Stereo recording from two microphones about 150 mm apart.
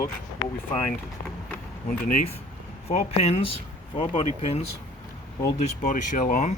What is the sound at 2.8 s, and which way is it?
Speech, 40° left (ahead or behind).